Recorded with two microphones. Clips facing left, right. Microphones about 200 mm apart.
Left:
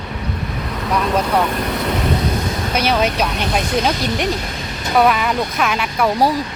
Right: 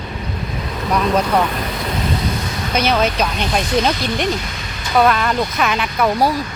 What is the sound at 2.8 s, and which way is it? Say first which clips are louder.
Speech: right 1 dB; 10° left (ahead or behind).